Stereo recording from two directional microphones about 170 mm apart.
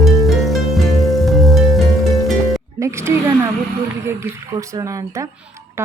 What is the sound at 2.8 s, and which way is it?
Speech, 15° right (ahead or behind).